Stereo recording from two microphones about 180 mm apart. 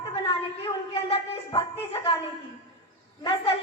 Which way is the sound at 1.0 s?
30° left (ahead or behind).